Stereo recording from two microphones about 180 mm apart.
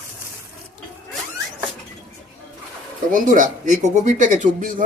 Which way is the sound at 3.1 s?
45° right (ahead or behind).